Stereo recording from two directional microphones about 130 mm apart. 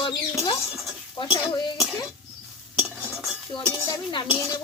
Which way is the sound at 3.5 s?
40° left (ahead or behind).